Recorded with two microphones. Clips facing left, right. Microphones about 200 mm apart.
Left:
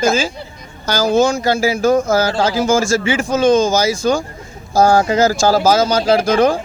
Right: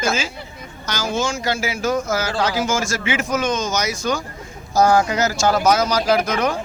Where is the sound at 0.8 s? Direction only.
35° left (ahead or behind).